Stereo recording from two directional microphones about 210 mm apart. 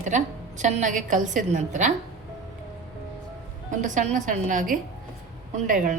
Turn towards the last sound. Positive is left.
turn(degrees=-35)  # may be behind; listen again after turning